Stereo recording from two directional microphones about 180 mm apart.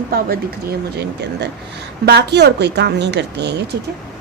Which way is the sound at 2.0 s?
70° right (ahead or behind).